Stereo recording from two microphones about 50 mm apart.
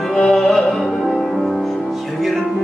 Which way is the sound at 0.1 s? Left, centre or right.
Centre.